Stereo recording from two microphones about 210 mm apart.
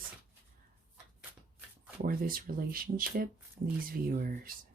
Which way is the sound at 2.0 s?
45° right (ahead or behind).